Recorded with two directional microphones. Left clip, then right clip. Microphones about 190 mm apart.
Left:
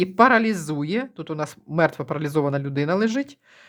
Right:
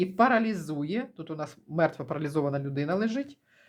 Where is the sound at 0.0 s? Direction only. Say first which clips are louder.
Left 7 dB; 30° left (ahead or behind).